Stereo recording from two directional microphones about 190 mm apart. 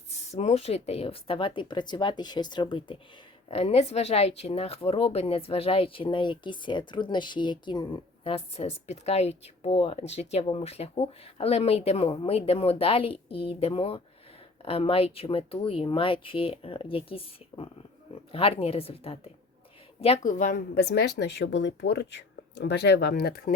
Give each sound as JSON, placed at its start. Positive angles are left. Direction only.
{"t": 0.1, "sound": "speech", "side_deg": 35}